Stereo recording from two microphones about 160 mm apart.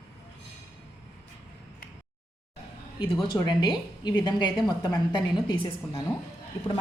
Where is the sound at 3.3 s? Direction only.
25° left (ahead or behind).